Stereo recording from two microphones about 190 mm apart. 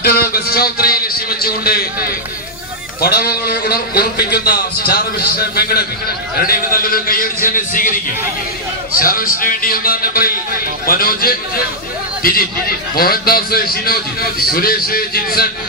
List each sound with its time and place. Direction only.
0.0 s a man's voice: 50° left (ahead or behind)
3.0 s a man's voice: 55° left (ahead or behind)
9.0 s a man's voice: 50° left (ahead or behind)